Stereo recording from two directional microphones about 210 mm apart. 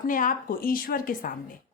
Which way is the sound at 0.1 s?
40° left (ahead or behind).